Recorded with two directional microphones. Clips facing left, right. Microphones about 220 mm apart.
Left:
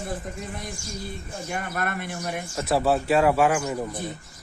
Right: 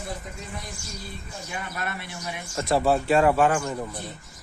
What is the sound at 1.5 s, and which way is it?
Speech, 50° left (ahead or behind).